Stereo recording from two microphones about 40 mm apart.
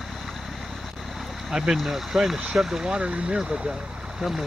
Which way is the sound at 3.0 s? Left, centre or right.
Right.